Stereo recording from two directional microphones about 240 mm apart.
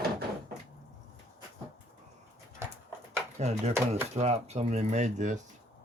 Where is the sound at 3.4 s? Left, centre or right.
Right.